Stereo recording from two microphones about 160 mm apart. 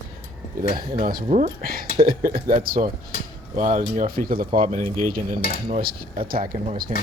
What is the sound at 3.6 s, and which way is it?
Speech, 50° right (ahead or behind).